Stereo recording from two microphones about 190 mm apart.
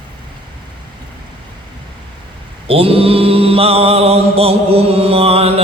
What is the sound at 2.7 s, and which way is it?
Mantra, 30° right (ahead or behind).